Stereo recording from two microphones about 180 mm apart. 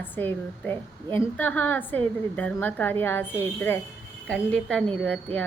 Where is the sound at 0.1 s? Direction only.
10° left (ahead or behind).